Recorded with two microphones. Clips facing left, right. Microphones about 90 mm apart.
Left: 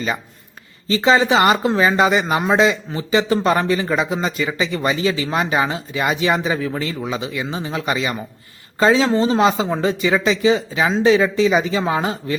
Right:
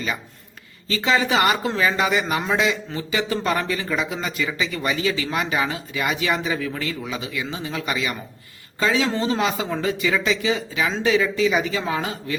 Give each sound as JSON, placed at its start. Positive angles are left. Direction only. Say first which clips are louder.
{"t": 0.9, "sound": "a man's voice", "louder": "left 6 dB", "side_deg": 25}